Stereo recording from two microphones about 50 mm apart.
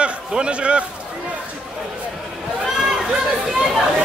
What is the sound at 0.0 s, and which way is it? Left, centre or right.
Speech, right.